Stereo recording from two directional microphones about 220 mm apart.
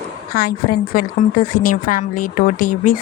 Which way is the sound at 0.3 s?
40° left (ahead or behind).